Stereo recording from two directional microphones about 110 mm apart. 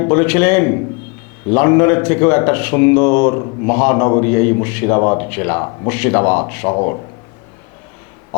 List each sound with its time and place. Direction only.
0.0 s a man's voice: 15° left (ahead or behind)
5.9 s a man's voice: 15° left (ahead or behind)
6.7 s speech: 30° left (ahead or behind)